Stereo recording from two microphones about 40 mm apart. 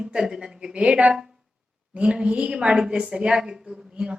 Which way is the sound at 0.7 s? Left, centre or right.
Right.